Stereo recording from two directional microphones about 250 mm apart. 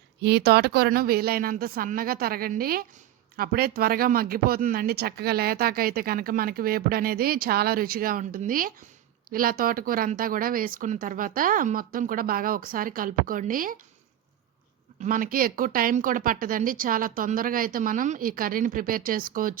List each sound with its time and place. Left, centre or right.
0.2 s speech: right
15.0 s speech: right